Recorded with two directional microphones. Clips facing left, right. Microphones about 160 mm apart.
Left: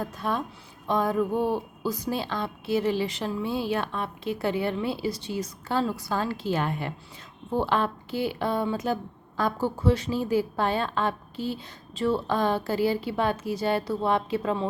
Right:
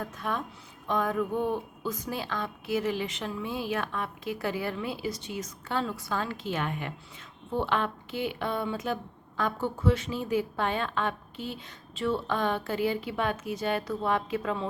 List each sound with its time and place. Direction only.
0.0 s a woman's voice: 30° left (ahead or behind)